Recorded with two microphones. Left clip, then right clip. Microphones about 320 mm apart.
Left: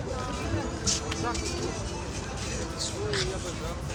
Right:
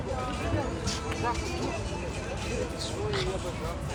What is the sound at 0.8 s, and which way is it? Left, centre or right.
Vehicle, centre.